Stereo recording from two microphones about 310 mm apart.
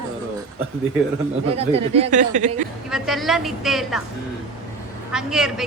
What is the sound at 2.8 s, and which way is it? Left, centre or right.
A woman's voice, centre.